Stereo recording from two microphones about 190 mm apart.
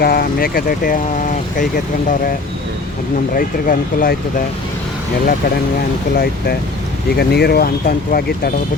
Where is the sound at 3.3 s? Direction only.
50° left (ahead or behind).